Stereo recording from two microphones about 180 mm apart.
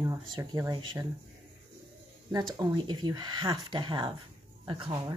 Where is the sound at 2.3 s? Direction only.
20° right (ahead or behind).